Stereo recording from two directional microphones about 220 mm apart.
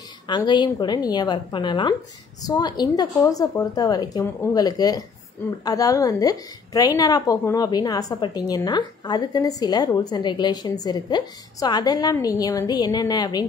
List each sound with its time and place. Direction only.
0.3 s a woman's voice: 20° left (ahead or behind)